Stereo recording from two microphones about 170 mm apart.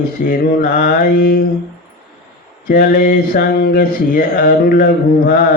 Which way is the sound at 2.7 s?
60° left (ahead or behind).